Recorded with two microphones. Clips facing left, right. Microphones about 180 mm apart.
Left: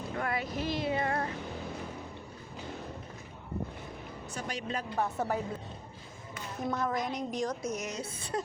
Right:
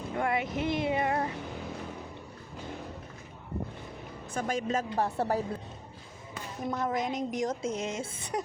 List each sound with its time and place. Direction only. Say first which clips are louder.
0.2 s a woman's voice: right 4 dB; 20° right (ahead or behind)
4.4 s a woman's voice: right 7 dB; 45° right (ahead or behind)
6.7 s a woman's voice: right 2 dB; 20° right (ahead or behind)